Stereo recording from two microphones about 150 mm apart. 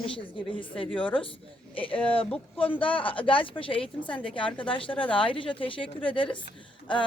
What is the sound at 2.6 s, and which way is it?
A woman's voice, 35° left (ahead or behind).